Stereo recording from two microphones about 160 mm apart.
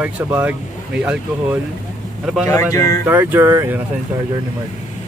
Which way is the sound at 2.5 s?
20° left (ahead or behind).